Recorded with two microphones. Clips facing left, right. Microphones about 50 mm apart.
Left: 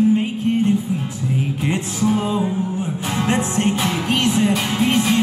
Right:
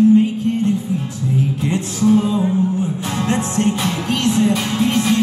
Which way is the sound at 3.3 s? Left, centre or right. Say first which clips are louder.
Right 1 dB; left.